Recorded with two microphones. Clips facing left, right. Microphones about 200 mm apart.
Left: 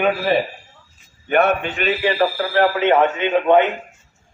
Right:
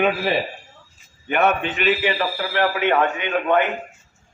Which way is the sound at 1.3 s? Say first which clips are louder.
Left 3 dB; 40° left (ahead or behind).